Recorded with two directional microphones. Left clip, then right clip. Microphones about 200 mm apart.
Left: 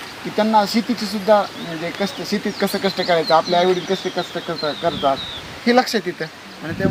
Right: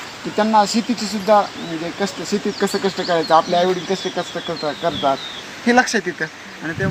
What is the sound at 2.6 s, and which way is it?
Speech, 45° left (ahead or behind).